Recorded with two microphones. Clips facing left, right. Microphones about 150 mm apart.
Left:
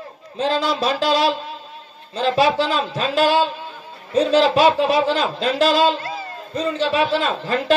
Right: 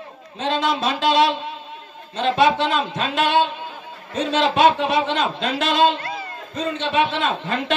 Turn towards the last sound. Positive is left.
turn(degrees=35)  # may be behind; listen again after turning